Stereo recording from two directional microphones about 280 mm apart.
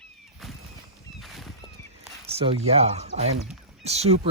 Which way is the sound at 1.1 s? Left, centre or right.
Centre.